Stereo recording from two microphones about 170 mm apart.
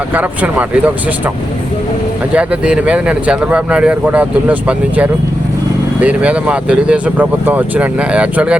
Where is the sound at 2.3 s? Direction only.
5° right (ahead or behind).